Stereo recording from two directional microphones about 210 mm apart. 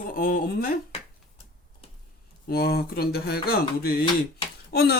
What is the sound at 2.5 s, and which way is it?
Speech, 50° left (ahead or behind).